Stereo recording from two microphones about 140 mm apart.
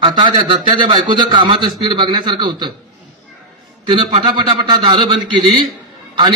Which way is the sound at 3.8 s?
35° right (ahead or behind).